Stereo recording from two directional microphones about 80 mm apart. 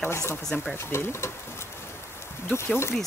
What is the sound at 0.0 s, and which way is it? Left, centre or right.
Speech, left.